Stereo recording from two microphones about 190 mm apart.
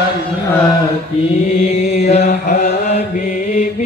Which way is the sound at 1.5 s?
35° left (ahead or behind).